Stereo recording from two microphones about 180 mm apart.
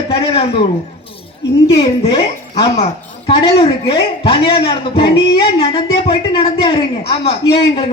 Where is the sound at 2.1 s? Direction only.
30° left (ahead or behind).